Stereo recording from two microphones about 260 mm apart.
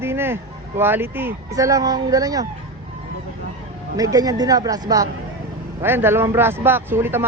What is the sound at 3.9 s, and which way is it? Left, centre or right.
A man's voice, centre.